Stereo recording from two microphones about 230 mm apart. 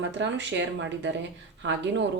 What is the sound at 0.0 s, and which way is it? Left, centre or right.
Speech, right.